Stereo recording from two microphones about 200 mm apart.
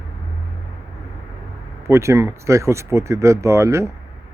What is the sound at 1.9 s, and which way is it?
A man's voice, 15° right (ahead or behind).